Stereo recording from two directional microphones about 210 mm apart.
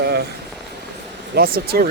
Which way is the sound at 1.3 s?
45° right (ahead or behind).